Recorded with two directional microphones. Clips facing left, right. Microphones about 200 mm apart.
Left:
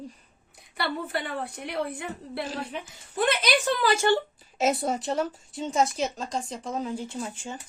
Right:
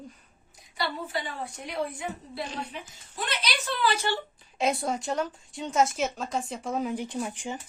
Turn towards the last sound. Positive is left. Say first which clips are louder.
# right 2 dB
turn(degrees=-15)  # may be behind; listen again after turning